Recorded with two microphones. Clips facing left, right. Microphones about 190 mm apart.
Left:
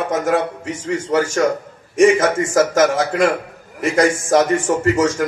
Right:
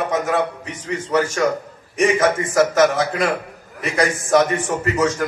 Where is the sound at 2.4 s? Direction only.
45° left (ahead or behind).